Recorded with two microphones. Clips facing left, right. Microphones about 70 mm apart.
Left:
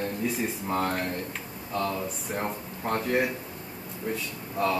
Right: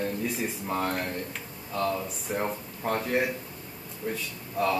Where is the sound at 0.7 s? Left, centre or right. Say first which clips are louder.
Left 1 dB; centre.